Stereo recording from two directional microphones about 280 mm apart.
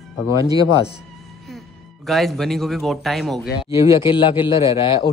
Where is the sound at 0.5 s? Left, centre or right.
Centre.